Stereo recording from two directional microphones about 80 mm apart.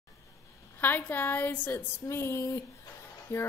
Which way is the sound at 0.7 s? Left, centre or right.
Left.